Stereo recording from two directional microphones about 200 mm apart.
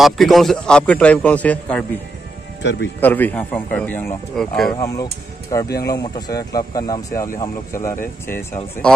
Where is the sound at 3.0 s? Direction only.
10° left (ahead or behind).